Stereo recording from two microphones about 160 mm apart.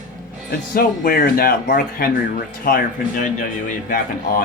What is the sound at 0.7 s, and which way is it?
Speech, 65° left (ahead or behind).